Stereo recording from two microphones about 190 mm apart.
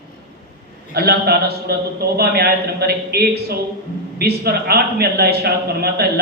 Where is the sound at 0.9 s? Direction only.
55° right (ahead or behind).